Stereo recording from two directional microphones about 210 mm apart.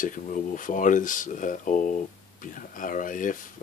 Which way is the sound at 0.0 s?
40° left (ahead or behind).